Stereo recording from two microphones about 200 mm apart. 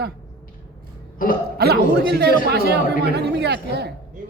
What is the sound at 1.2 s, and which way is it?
Speech, 45° left (ahead or behind).